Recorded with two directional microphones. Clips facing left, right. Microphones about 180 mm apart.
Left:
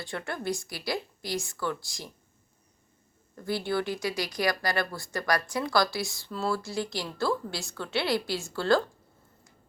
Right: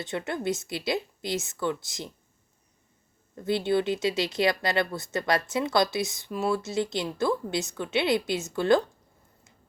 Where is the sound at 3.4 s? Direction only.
20° right (ahead or behind).